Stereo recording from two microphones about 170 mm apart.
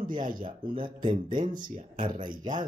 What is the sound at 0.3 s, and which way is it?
Speech, 30° right (ahead or behind).